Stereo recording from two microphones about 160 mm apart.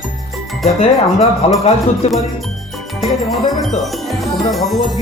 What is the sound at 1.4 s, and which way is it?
Speech, 40° left (ahead or behind).